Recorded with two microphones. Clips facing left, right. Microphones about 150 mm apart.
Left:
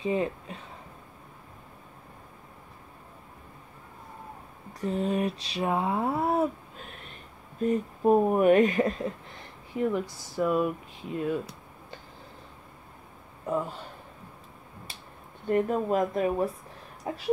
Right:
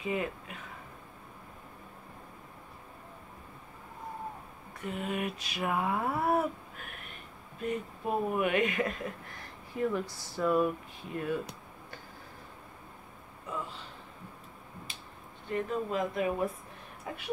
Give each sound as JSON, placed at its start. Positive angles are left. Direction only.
{"t": 0.0, "sound": "speech", "side_deg": 30}
{"t": 4.7, "sound": "a sound", "side_deg": 35}
{"t": 7.6, "sound": "speech", "side_deg": 40}
{"t": 9.8, "sound": "speech", "side_deg": 15}
{"t": 11.1, "sound": "a sound", "side_deg": 20}
{"t": 13.5, "sound": "speech", "side_deg": 50}
{"t": 15.5, "sound": "speech", "side_deg": 45}
{"t": 17.1, "sound": "speech", "side_deg": 30}